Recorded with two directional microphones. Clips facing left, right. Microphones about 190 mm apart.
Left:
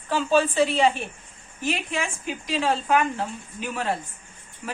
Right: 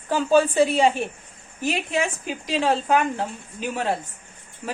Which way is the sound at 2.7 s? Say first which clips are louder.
Right 1 dB; 35° right (ahead or behind).